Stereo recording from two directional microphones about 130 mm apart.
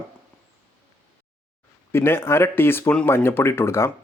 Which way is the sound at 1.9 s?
20° left (ahead or behind).